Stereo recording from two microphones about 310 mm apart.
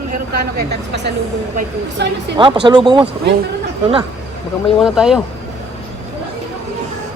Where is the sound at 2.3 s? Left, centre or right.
Centre.